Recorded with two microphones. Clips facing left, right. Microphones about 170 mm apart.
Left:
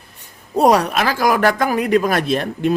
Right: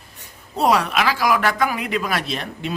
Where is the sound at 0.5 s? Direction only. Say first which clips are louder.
Left 4 dB; 45° left (ahead or behind).